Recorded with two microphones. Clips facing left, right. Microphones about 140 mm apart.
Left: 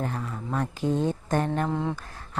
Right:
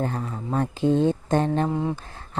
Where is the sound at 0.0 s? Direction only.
30° right (ahead or behind).